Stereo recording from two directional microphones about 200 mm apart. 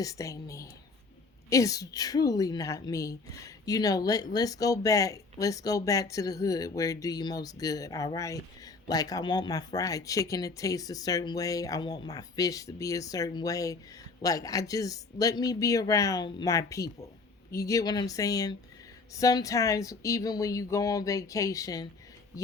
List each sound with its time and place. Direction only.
0.0 s a woman's voice: 15° left (ahead or behind)